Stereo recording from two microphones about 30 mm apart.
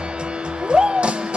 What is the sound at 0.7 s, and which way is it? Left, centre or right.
Music, right.